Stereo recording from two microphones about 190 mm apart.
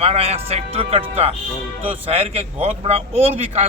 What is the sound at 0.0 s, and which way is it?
A man's voice, 30° right (ahead or behind).